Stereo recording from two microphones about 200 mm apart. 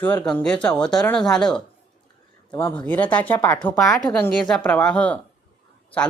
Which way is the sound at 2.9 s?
10° left (ahead or behind).